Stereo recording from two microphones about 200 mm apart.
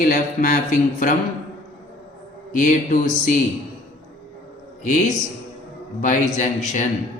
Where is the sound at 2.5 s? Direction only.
40° left (ahead or behind).